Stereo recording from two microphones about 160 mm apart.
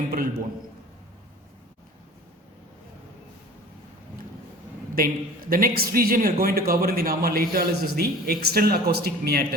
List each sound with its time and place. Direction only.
0.1 s a man's voice: 65° right (ahead or behind)
4.9 s a man's voice: 65° right (ahead or behind)